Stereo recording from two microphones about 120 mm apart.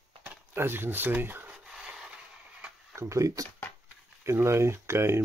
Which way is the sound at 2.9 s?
25° right (ahead or behind).